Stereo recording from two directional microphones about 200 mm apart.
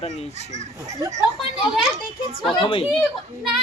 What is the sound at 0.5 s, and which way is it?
Speech, 35° right (ahead or behind).